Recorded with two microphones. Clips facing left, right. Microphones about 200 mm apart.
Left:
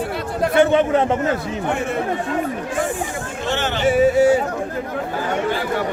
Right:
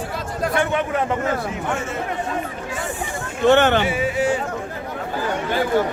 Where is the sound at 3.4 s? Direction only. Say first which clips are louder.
Right 9 dB; 60° right (ahead or behind).